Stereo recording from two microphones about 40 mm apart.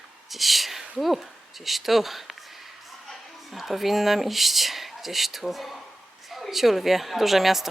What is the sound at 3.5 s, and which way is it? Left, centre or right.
A woman's voice, centre.